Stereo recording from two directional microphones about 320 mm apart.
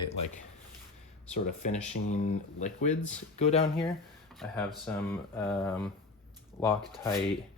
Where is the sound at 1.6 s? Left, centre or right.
Left.